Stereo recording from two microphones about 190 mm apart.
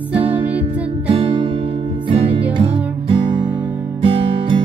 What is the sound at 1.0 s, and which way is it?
Music, 30° right (ahead or behind).